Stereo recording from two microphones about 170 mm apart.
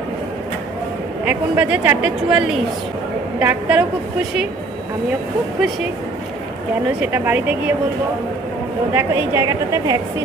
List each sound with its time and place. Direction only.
1.2 s a woman's voice: 10° right (ahead or behind)
7.0 s a woman's voice: 10° right (ahead or behind)
8.9 s a woman's voice: 15° right (ahead or behind)